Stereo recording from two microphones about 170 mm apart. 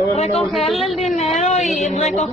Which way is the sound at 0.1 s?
35° left (ahead or behind).